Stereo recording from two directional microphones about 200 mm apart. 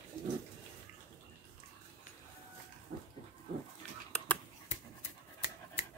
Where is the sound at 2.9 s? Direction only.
55° right (ahead or behind).